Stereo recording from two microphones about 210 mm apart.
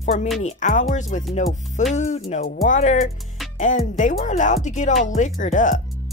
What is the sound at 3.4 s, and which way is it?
Music, centre (ahead or behind).